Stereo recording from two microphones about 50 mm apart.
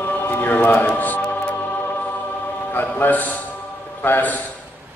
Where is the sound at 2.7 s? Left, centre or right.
Left.